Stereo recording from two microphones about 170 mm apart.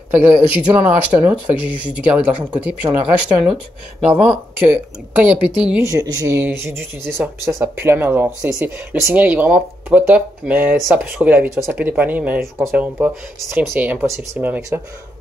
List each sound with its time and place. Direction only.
0.1 s speech: 10° right (ahead or behind)
5.9 s speech: 20° right (ahead or behind)